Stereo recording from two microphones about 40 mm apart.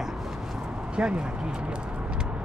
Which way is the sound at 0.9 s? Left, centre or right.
Right.